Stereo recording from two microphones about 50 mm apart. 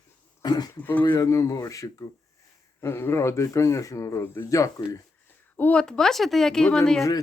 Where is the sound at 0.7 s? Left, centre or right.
Left.